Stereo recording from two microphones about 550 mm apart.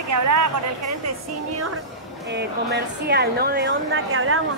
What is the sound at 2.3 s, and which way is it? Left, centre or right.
Speech, centre.